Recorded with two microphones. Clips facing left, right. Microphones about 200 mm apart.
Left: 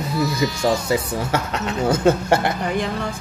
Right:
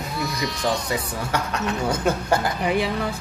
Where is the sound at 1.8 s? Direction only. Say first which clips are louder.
Left 8 dB; 25° left (ahead or behind).